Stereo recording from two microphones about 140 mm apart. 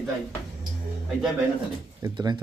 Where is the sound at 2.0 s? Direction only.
30° right (ahead or behind).